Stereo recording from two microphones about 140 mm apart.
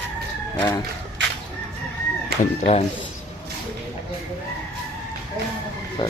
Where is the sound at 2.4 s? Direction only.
60° left (ahead or behind).